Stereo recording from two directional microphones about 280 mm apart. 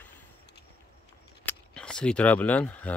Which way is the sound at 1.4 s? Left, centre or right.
Centre.